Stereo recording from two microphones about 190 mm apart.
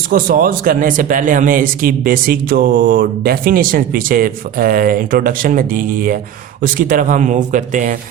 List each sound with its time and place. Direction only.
0.1 s speech: 50° right (ahead or behind)